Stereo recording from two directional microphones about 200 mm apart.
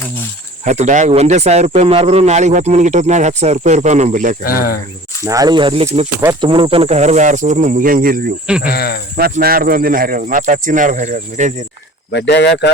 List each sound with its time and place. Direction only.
0.6 s speech: 35° right (ahead or behind)
4.4 s speech: 50° left (ahead or behind)
5.2 s speech: 15° right (ahead or behind); by 8.3 s 45° right (ahead or behind)
8.4 s speech: 5° right (ahead or behind)
8.7 s speech: 50° left (ahead or behind)
9.1 s speech: 50° right (ahead or behind)
12.1 s speech: 60° left (ahead or behind)